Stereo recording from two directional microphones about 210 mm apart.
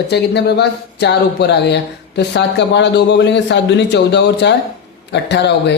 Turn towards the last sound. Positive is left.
turn(degrees=55)  # may be behind; listen again after turning